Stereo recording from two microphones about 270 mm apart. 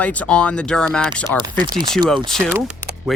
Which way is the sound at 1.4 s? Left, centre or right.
Centre.